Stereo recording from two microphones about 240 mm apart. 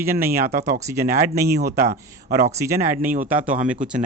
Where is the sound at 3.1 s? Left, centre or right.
Right.